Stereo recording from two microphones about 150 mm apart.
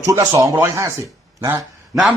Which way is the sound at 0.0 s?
25° right (ahead or behind).